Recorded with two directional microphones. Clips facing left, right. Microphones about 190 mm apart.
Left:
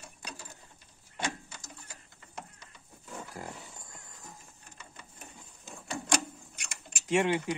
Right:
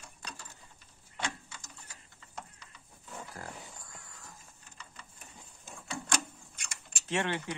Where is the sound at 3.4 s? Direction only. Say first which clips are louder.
Left 4 dB; 15° left (ahead or behind).